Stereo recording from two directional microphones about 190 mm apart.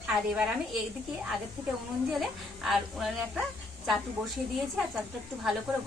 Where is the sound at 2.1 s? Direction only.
Centre (ahead or behind).